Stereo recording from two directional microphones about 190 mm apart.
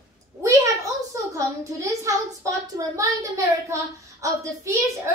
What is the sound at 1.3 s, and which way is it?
A child's voice, 15° right (ahead or behind).